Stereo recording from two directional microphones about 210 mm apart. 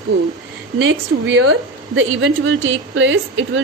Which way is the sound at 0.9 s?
60° right (ahead or behind).